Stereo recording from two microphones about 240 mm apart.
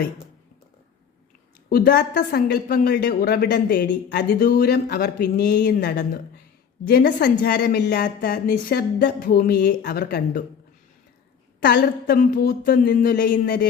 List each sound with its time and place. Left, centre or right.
1.7 s a woman's voice: left
11.6 s a woman's voice: left